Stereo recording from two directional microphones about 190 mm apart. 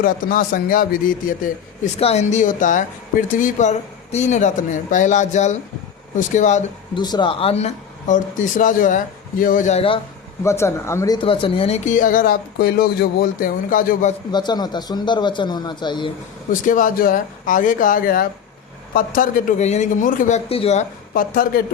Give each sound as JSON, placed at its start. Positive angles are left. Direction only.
{"t": 0.0, "sound": "a man's voice", "side_deg": 45}
{"t": 2.0, "sound": "speech", "side_deg": 35}
{"t": 6.9, "sound": "speech", "side_deg": 25}
{"t": 10.4, "sound": "speech", "side_deg": 15}
{"t": 14.3, "sound": "speech", "side_deg": 20}
{"t": 16.5, "sound": "a man's voice", "side_deg": 45}
{"t": 21.1, "sound": "a man's voice", "side_deg": 50}